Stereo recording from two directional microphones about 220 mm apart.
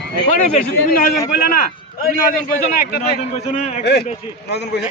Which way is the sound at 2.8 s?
45° left (ahead or behind).